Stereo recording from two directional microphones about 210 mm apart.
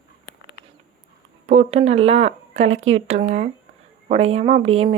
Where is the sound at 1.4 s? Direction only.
30° right (ahead or behind).